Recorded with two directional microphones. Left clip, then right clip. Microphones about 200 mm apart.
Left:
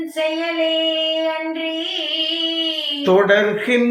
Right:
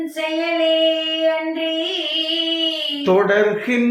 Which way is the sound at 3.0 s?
15° left (ahead or behind).